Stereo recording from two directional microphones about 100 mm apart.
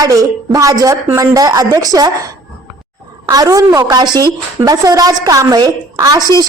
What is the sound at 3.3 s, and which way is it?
A woman's voice, 35° right (ahead or behind).